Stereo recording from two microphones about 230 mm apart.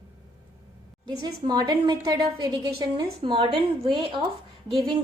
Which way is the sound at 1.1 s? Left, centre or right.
Centre.